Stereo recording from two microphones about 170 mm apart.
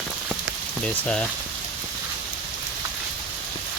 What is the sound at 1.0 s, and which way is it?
Speech, 5° left (ahead or behind).